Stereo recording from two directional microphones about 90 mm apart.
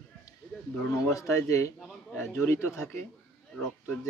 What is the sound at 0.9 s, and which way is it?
Speech, 35° left (ahead or behind).